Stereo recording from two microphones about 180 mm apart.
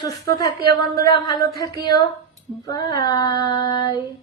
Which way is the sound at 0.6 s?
60° right (ahead or behind).